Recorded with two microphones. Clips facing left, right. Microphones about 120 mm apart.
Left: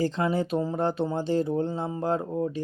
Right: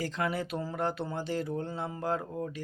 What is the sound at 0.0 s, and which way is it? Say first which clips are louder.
Speech: left 7 dB; 30° left (ahead or behind).